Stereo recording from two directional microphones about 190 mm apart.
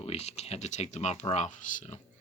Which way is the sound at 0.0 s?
35° left (ahead or behind).